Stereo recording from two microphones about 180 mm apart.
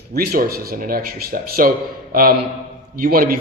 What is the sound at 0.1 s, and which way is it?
A man's voice, 60° right (ahead or behind).